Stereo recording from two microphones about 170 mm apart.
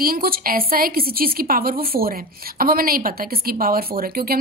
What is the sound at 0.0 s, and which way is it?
A woman's voice, 60° right (ahead or behind).